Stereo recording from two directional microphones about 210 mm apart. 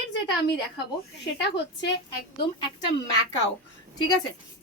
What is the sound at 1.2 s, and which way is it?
Speech, 55° left (ahead or behind).